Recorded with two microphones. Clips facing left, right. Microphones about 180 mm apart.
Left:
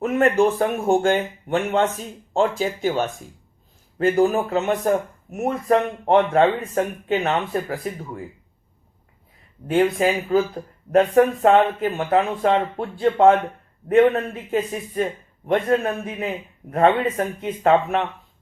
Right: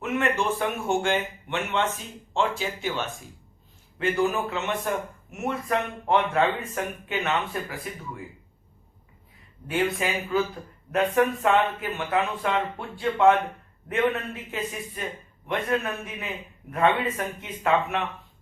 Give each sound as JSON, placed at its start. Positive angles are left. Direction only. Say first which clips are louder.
{"t": 0.0, "sound": "speech", "louder": "left 8 dB", "side_deg": 40}
{"t": 9.6, "sound": "a woman's voice", "louder": "left 8 dB", "side_deg": 45}